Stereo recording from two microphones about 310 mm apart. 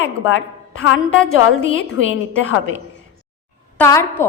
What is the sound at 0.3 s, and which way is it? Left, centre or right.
A woman's voice, left.